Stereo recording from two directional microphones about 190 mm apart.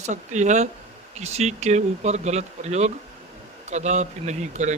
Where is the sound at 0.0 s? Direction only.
40° right (ahead or behind).